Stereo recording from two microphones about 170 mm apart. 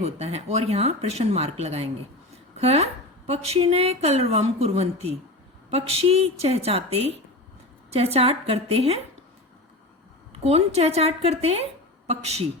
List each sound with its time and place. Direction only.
0.0 s a woman's voice: 40° right (ahead or behind)
10.4 s a woman's voice: 40° right (ahead or behind)